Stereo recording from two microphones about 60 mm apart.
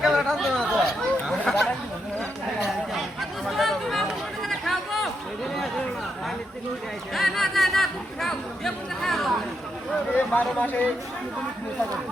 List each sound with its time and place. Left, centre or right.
0.0 s chatter: centre
2.6 s a sound: centre
4.4 s chatter: centre
7.1 s chatter: centre
10.2 s speech: left